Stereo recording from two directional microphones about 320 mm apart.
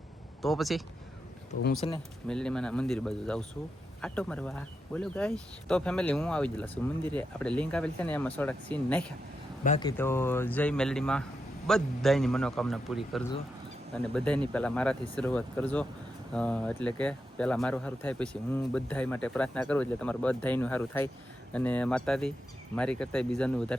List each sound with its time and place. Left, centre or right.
0.4 s speech: centre
1.8 s speech: centre
2.2 s speech: centre
9.6 s speech: centre
10.0 s speech: centre